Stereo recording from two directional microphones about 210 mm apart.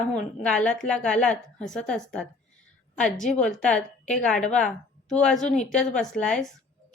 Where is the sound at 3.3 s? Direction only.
5° left (ahead or behind).